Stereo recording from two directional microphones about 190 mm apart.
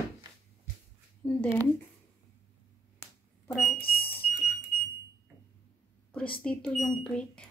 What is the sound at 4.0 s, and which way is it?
Fire alarm, 30° left (ahead or behind).